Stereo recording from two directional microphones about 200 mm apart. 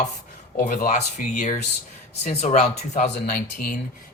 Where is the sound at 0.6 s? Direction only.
40° left (ahead or behind).